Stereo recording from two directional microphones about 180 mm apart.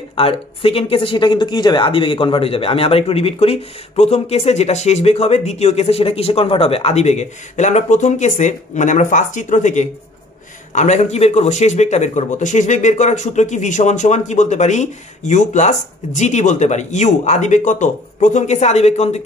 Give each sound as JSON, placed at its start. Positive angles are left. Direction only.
{"t": 0.1, "sound": "speech", "side_deg": 30}